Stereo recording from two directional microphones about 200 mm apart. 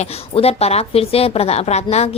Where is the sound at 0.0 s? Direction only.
30° left (ahead or behind).